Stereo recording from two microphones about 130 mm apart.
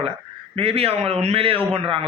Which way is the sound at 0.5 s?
50° right (ahead or behind).